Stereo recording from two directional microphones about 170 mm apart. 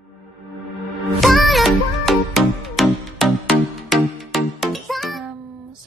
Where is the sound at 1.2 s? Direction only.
Centre (ahead or behind).